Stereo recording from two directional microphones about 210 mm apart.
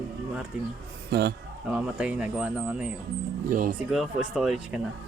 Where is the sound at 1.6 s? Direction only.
5° right (ahead or behind).